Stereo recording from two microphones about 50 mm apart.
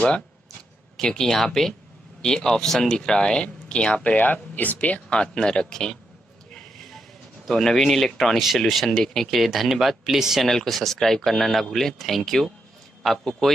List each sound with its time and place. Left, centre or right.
0.9 s speech: centre
4.0 s speech: left; by 5.9 s centre
6.5 s a sound: centre
7.4 s speech: centre
10.4 s speech: centre